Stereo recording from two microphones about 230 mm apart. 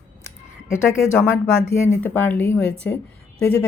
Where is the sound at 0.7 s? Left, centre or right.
Centre.